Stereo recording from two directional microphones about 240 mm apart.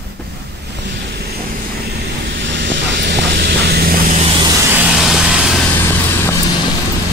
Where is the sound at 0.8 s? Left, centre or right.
Right.